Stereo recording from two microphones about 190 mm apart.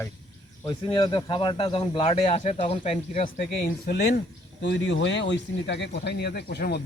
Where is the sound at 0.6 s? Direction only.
25° left (ahead or behind).